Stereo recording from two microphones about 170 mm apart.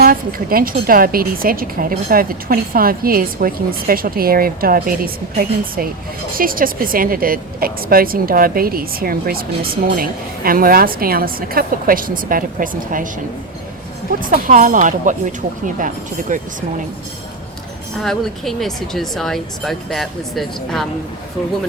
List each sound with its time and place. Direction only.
0.0 s a woman's voice: 60° right (ahead or behind)
14.2 s speech: 55° right (ahead or behind)
16.3 s speech: 50° right (ahead or behind)
18.0 s speech: centre (ahead or behind)